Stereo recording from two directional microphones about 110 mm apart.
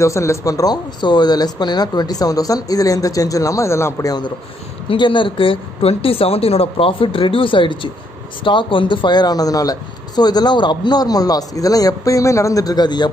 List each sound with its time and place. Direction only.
0.0 s speech: 25° left (ahead or behind)
4.8 s a woman's voice: 45° left (ahead or behind)